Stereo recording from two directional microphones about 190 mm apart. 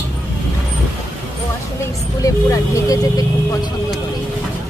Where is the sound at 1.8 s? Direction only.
15° left (ahead or behind).